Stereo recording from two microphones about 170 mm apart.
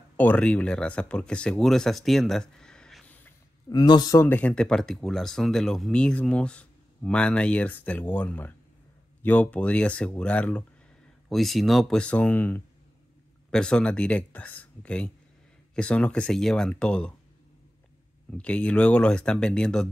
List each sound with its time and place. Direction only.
0.2 s speech: 10° left (ahead or behind)
3.6 s a man's voice: 25° left (ahead or behind)
4.3 s speech: 10° left (ahead or behind)
18.4 s speech: 5° left (ahead or behind)